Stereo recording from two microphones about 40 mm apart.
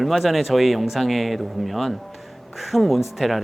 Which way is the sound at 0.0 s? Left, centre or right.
Centre.